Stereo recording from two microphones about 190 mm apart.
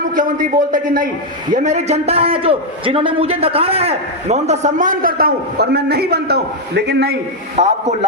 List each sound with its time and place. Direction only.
0.2 s a man's voice: 45° right (ahead or behind)
7.5 s a man's voice: 35° right (ahead or behind)